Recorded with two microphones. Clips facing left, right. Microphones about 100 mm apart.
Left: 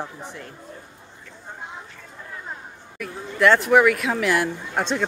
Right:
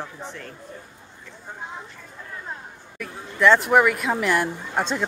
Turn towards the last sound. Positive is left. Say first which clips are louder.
# left 1 dB
turn(degrees=-5)  # may be behind; listen again after turning